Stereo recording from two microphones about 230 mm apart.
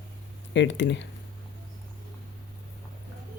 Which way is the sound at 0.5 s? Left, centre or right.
Left.